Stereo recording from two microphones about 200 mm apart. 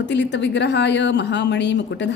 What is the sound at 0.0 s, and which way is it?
Speech, 60° left (ahead or behind).